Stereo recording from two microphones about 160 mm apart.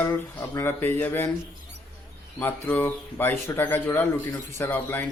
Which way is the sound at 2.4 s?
10° left (ahead or behind).